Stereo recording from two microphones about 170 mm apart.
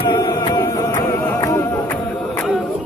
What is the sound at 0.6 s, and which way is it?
Music, 15° left (ahead or behind).